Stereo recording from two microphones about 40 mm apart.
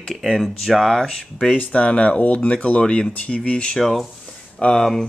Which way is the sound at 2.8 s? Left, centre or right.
Centre.